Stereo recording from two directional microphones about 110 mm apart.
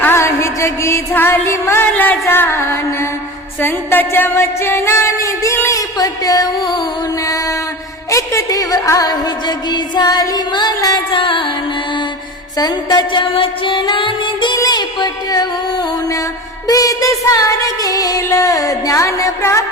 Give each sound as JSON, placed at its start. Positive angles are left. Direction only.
{"t": 0.0, "sound": "music", "side_deg": 20}
{"t": 7.3, "sound": "mantra", "side_deg": 30}
{"t": 8.1, "sound": "music", "side_deg": 25}
{"t": 12.5, "sound": "music", "side_deg": 40}
{"t": 13.3, "sound": "music", "side_deg": 50}
{"t": 14.5, "sound": "music", "side_deg": 40}